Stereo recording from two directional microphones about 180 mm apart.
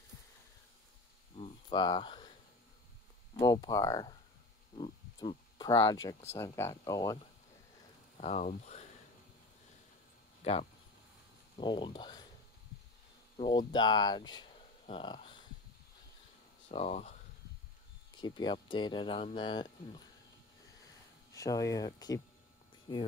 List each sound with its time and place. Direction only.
1.3 s a sound: 30° left (ahead or behind)
3.3 s speech: 20° left (ahead or behind)
8.2 s speech: 40° left (ahead or behind)
10.4 s speech: 35° left (ahead or behind)
13.4 s speech: 25° left (ahead or behind)
16.7 s speech: 35° left (ahead or behind)
18.2 s speech: 25° left (ahead or behind)
21.3 s speech: 20° left (ahead or behind)